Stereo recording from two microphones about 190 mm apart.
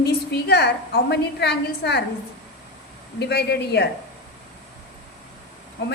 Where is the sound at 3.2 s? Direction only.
60° left (ahead or behind).